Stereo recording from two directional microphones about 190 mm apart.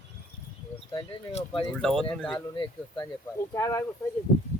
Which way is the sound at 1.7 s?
5° left (ahead or behind).